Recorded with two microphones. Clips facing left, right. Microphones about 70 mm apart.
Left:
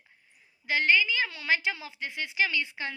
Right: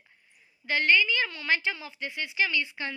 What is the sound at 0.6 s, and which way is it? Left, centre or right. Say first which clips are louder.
A woman's voice: right 1 dB; left.